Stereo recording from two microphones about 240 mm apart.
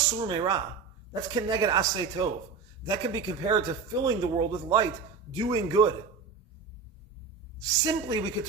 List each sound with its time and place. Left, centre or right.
0.1 s a man's voice: centre
7.6 s a man's voice: centre